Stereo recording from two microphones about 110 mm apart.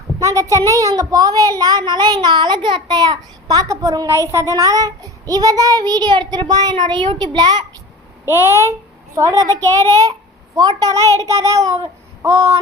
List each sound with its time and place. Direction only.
0.2 s a woman's voice: 30° right (ahead or behind)
8.3 s a child's voice: 20° right (ahead or behind)
10.5 s a child's voice: 35° right (ahead or behind)